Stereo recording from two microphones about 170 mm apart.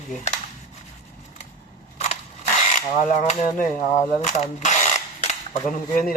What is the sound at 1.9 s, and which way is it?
Crushing, 40° left (ahead or behind).